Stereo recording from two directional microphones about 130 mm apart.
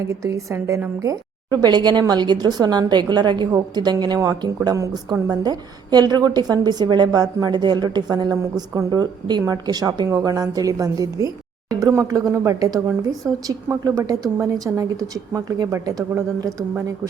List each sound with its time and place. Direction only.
0.1 s a woman's voice: 25° right (ahead or behind)